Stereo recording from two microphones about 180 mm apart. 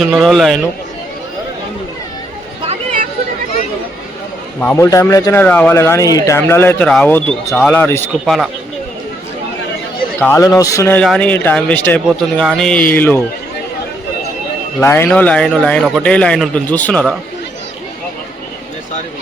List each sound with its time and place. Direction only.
0.0 s a man's voice: centre (ahead or behind)
2.6 s a sound: 40° right (ahead or behind)
4.6 s a man's voice: 10° left (ahead or behind)
10.2 s a man's voice: 15° left (ahead or behind)
11.0 s a man's voice: 5° left (ahead or behind)
14.8 s a man's voice: 15° left (ahead or behind)